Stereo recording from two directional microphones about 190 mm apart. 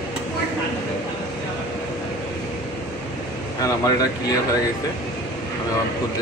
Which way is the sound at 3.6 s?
20° left (ahead or behind).